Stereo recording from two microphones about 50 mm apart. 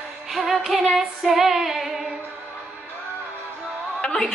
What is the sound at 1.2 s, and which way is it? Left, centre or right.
Female singing, centre.